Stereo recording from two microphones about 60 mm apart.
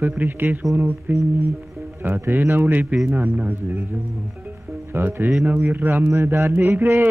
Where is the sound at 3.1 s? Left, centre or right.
Right.